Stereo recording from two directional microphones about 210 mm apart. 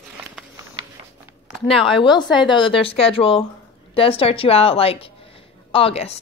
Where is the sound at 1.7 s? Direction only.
25° left (ahead or behind).